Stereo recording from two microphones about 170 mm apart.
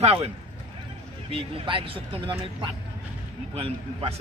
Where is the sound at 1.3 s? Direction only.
30° right (ahead or behind).